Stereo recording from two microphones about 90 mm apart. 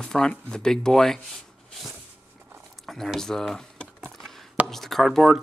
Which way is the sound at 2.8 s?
Centre (ahead or behind).